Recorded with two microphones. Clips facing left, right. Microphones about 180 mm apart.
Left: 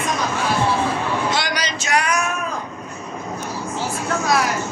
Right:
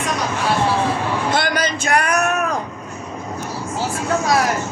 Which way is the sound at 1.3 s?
55° right (ahead or behind).